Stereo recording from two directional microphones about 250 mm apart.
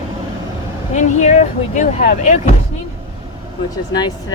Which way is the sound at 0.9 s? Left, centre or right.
Left.